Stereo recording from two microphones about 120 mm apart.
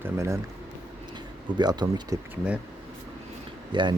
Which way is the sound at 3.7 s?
40° right (ahead or behind).